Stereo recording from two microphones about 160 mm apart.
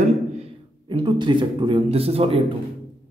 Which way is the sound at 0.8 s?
30° right (ahead or behind).